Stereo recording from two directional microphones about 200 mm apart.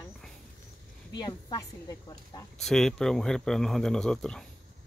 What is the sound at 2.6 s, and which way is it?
Speech, 5° left (ahead or behind).